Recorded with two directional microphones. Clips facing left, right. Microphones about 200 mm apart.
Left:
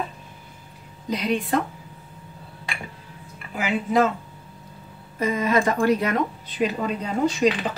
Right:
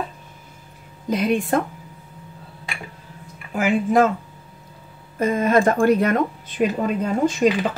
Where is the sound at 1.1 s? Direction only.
50° right (ahead or behind).